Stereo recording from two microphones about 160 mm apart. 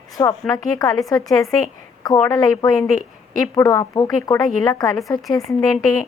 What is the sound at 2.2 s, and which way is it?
Speech, 25° left (ahead or behind).